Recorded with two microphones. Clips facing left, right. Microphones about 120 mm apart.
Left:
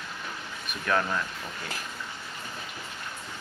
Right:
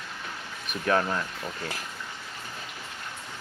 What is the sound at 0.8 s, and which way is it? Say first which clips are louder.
Speech: right 2 dB; 30° right (ahead or behind).